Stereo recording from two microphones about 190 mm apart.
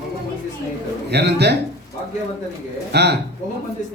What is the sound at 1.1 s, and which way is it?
Speech, 60° right (ahead or behind).